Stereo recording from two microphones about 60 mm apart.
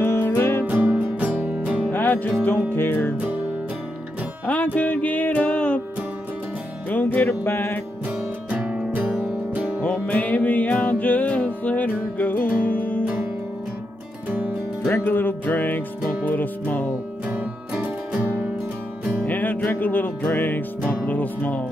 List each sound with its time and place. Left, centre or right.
0.0 s music: left
0.7 s music: right
1.9 s music: left
3.2 s music: right
4.5 s music: left
7.2 s music: left
8.5 s music: right
9.8 s music: left
13.0 s music: right
14.9 s music: left
17.3 s music: right
19.2 s music: left